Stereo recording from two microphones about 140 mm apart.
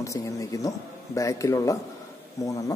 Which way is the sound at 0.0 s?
25° left (ahead or behind).